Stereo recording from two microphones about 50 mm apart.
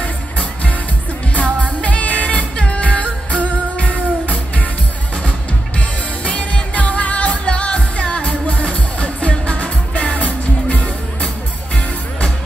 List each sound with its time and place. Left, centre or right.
0.0 s music: left
5.8 s music: left